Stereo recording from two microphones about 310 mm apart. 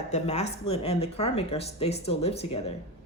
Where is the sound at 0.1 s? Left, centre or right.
Left.